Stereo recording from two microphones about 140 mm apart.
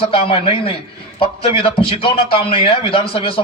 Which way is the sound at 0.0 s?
40° left (ahead or behind).